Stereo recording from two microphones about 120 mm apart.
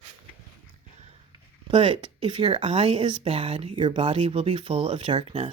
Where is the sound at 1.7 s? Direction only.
50° right (ahead or behind).